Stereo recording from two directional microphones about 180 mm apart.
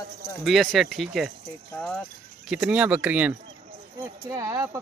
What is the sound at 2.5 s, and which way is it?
Speech, 5° right (ahead or behind).